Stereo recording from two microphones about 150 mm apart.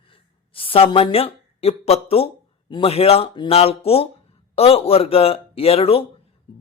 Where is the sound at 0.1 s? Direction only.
35° left (ahead or behind).